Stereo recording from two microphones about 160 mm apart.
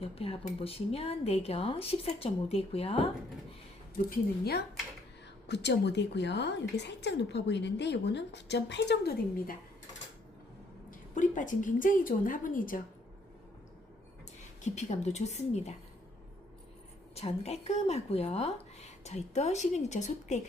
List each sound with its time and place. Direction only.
0.0 s speech: 40° left (ahead or behind)
3.9 s a woman's voice: 70° left (ahead or behind)
5.5 s a woman's voice: 90° left
11.1 s a woman's voice: 55° left (ahead or behind)
14.6 s speech: 45° left (ahead or behind)
17.2 s speech: 40° left (ahead or behind)